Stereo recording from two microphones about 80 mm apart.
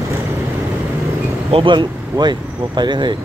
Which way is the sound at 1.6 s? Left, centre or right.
Right.